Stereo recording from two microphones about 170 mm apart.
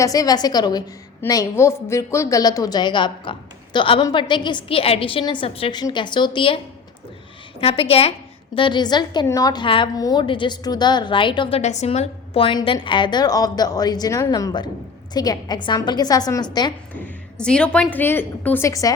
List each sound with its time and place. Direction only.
0.0 s a woman's voice: 20° left (ahead or behind)
7.6 s a woman's voice: 35° left (ahead or behind)
16.9 s a woman's voice: 5° left (ahead or behind)